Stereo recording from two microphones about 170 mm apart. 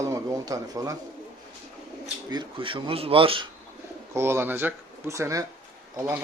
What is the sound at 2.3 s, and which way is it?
Speech, 30° right (ahead or behind).